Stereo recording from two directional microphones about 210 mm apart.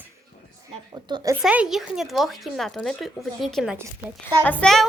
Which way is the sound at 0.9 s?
20° right (ahead or behind).